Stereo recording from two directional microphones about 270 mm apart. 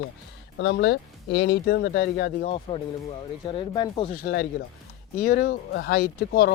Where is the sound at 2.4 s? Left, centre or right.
Left.